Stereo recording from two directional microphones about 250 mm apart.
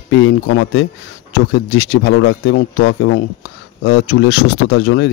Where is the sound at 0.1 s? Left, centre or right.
Left.